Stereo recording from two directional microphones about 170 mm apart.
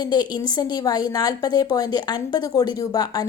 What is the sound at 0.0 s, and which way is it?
A woman's voice, 25° left (ahead or behind).